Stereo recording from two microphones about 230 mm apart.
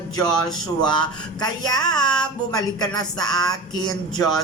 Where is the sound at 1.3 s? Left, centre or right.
Centre.